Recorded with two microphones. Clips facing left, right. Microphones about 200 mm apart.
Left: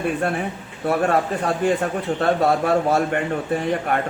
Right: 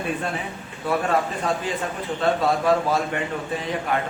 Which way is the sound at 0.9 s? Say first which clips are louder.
Left 3 dB; 55° left (ahead or behind).